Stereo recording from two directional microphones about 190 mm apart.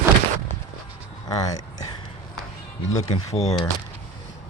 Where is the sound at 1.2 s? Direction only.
20° left (ahead or behind).